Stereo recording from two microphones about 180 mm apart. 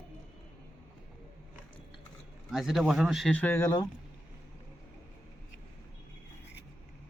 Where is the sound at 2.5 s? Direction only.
Centre (ahead or behind); by 3.8 s 15° left (ahead or behind).